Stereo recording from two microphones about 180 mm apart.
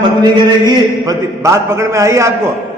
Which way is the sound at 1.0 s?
15° right (ahead or behind).